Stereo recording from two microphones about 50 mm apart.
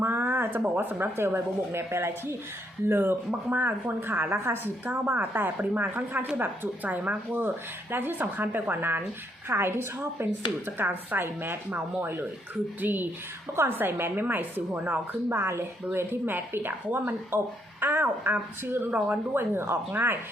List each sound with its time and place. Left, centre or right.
0.0 s a sound: right
0.8 s speech: right
6.8 s speech: right
7.4 s speech: right
9.5 s speech: right
10.8 s speech: right